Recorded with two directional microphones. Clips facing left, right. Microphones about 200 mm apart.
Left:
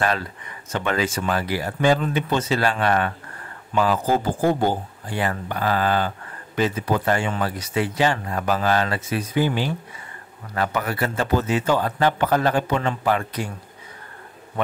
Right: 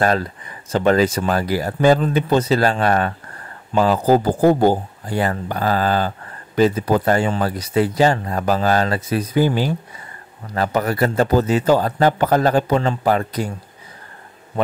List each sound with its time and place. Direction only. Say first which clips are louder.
0.0 s speech: right 5 dB; 40° right (ahead or behind)